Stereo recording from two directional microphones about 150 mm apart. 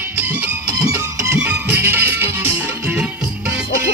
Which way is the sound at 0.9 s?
15° right (ahead or behind).